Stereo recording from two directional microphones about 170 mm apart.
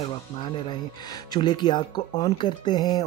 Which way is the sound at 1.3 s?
25° left (ahead or behind).